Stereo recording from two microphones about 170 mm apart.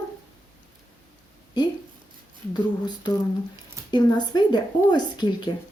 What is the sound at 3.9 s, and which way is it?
Speech, 25° left (ahead or behind).